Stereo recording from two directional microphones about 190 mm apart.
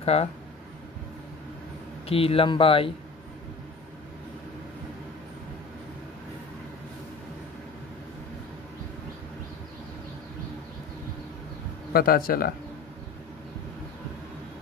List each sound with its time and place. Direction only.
0.0 s speech: 35° left (ahead or behind)
2.0 s speech: 30° left (ahead or behind)
11.9 s speech: 50° left (ahead or behind)